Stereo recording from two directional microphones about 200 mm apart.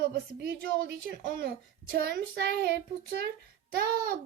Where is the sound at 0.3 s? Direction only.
50° right (ahead or behind).